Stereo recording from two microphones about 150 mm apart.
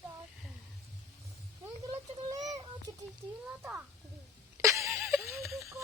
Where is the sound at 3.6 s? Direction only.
15° right (ahead or behind).